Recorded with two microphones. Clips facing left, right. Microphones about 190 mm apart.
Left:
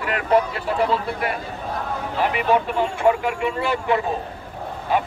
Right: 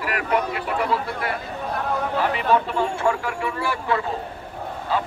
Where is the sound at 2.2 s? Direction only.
15° left (ahead or behind).